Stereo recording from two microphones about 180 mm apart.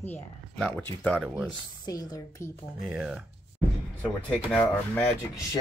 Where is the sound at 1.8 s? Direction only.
20° left (ahead or behind).